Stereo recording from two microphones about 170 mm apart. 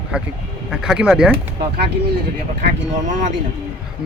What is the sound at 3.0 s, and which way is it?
Speech, 45° right (ahead or behind).